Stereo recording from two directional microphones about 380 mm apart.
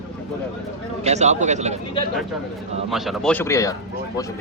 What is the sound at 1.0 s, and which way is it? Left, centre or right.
Speech, centre.